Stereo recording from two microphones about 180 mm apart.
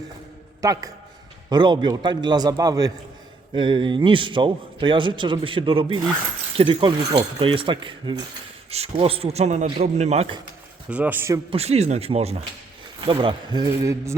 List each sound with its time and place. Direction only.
0.6 s a man's voice: 20° right (ahead or behind); by 10.3 s 35° right (ahead or behind)
10.8 s speech: 5° right (ahead or behind)
11.5 s a man's voice: 35° right (ahead or behind); by 14.2 s 15° right (ahead or behind)